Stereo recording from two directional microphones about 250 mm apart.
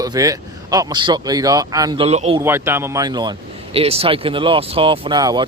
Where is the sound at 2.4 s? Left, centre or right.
Centre.